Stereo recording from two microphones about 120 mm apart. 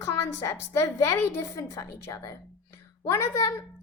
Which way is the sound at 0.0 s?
25° left (ahead or behind).